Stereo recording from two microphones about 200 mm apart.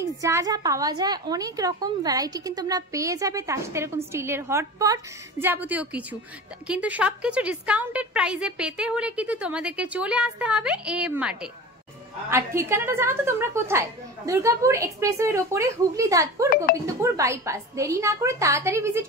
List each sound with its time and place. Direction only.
0.0 s a woman's voice: 15° right (ahead or behind)